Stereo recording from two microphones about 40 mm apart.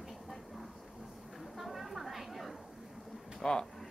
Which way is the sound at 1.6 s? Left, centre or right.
Centre.